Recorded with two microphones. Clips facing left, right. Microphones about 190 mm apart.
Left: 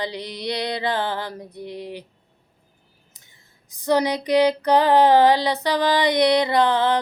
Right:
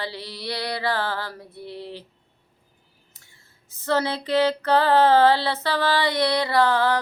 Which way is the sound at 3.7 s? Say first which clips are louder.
Left 4 dB; 15° left (ahead or behind).